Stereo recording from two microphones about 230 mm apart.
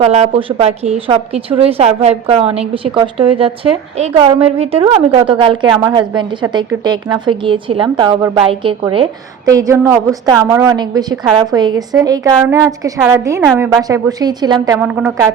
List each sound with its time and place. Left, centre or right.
0.0 s a woman's voice: right; by 15.1 s centre